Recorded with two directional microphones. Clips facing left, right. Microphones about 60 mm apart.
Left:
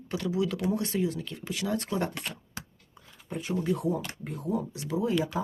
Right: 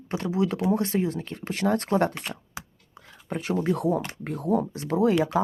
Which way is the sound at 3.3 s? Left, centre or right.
Right.